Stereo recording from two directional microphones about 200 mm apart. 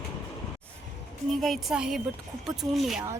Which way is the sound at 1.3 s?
Centre (ahead or behind).